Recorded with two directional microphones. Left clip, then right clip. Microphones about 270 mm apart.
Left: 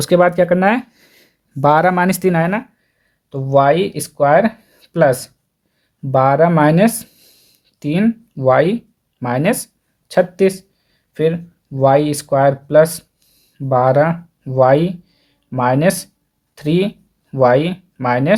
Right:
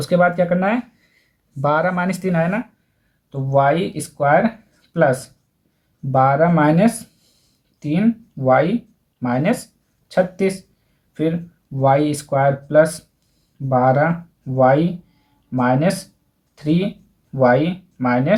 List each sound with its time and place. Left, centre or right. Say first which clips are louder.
0.0 s speech: left 4 dB; left